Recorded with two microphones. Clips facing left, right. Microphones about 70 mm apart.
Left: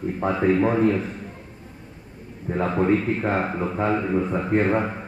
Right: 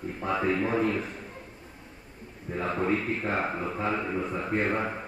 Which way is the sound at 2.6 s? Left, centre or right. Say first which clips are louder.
Left 7 dB; left.